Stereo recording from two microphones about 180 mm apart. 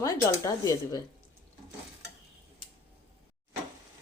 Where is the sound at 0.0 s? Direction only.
15° left (ahead or behind).